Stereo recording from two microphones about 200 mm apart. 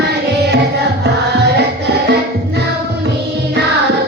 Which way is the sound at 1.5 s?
55° right (ahead or behind).